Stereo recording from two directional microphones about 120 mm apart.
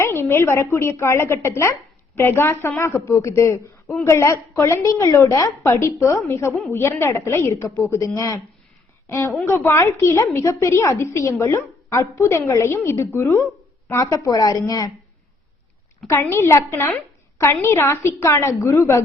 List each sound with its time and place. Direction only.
0.0 s a woman's voice: 20° left (ahead or behind)
16.0 s a woman's voice: 20° left (ahead or behind)